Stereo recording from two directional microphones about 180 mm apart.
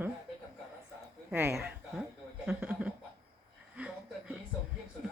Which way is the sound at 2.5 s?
5° right (ahead or behind).